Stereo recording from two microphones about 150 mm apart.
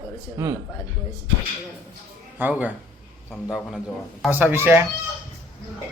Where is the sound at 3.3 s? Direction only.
Centre (ahead or behind).